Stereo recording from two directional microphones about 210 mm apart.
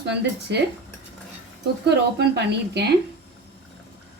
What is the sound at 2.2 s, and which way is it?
Speech, 55° right (ahead or behind).